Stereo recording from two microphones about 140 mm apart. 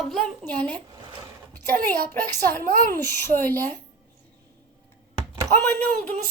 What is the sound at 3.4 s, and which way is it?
Speech, 15° left (ahead or behind).